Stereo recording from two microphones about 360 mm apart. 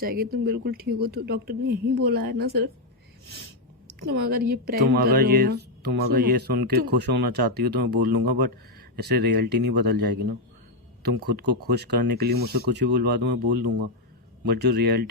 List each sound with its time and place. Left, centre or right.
0.0 s speech: right
4.0 s speech: right